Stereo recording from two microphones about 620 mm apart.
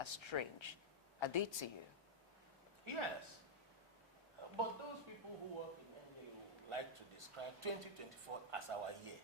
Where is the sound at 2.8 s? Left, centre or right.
Right.